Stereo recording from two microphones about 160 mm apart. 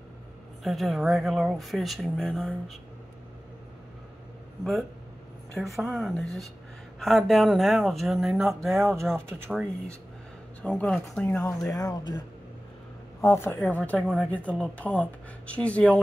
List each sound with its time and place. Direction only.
0.7 s speech: centre (ahead or behind)
5.6 s speech: centre (ahead or behind); by 12.2 s 25° left (ahead or behind)
13.2 s speech: 15° left (ahead or behind)